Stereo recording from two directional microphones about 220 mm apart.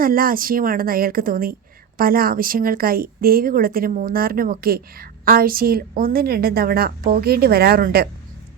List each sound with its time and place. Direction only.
0.0 s speech: 40° right (ahead or behind)